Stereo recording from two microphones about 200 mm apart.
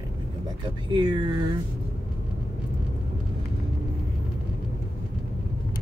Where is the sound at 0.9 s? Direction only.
25° right (ahead or behind).